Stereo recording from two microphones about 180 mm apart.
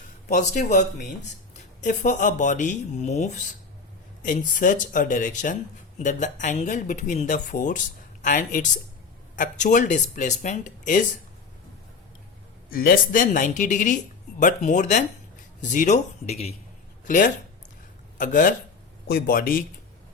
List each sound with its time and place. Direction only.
0.3 s speech: 45° left (ahead or behind)
12.7 s speech: 55° left (ahead or behind); by 16.6 s 35° left (ahead or behind)
17.1 s speech: 45° left (ahead or behind)